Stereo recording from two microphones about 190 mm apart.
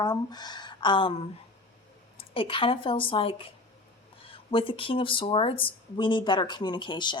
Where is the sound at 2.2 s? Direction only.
30° left (ahead or behind).